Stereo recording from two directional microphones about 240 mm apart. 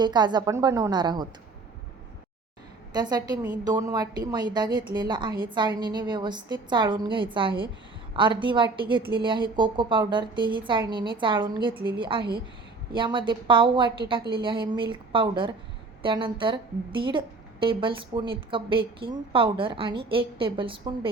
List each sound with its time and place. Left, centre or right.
0.0 s a woman's voice: centre
2.9 s a woman's voice: centre